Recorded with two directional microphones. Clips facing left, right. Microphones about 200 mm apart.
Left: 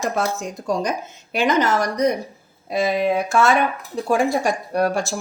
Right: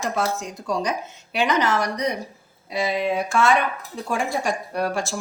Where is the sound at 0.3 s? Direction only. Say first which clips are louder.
Left 3 dB; 45° left (ahead or behind).